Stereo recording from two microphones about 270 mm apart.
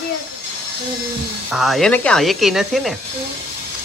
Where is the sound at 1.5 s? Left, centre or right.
Centre.